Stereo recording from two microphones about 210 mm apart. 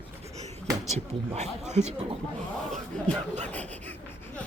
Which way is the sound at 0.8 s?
30° right (ahead or behind).